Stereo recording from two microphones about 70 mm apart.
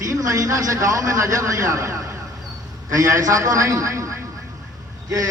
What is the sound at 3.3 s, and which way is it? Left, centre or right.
Speech, right.